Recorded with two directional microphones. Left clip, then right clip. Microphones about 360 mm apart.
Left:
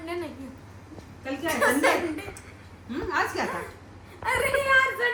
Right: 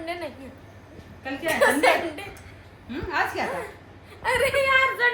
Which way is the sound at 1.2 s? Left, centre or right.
Centre.